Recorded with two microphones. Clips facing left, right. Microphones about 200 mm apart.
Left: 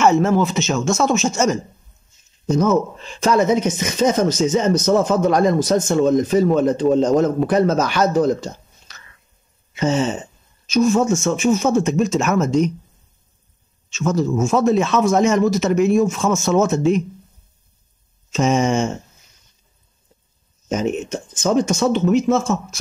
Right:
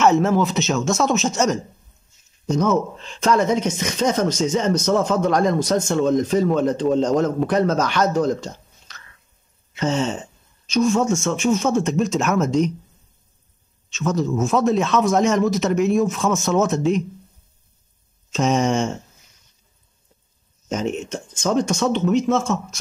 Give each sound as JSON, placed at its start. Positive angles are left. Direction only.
{"t": 0.0, "sound": "a man's voice", "side_deg": 0}
{"t": 13.8, "sound": "a man's voice", "side_deg": 0}
{"t": 18.3, "sound": "a man's voice", "side_deg": 5}
{"t": 20.6, "sound": "a man's voice", "side_deg": 5}